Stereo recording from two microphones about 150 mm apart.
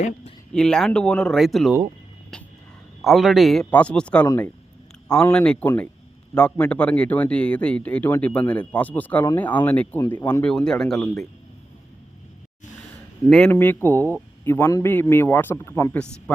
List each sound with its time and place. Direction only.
0.5 s a man's voice: 5° left (ahead or behind)
2.3 s vehicle: 5° left (ahead or behind)
3.0 s a man's voice: centre (ahead or behind)
13.2 s a man's voice: 5° left (ahead or behind)